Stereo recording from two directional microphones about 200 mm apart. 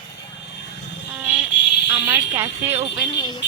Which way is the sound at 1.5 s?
60° left (ahead or behind).